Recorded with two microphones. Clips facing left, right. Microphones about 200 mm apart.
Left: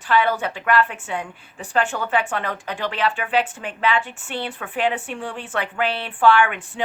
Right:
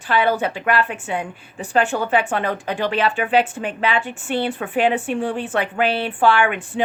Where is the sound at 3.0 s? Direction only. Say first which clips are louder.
Right 1 dB; 25° right (ahead or behind).